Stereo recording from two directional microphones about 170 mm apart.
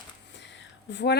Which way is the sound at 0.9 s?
90° left.